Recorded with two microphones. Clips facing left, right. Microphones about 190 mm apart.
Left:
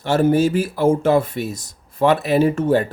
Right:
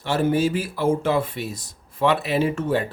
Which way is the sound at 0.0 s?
45° left (ahead or behind).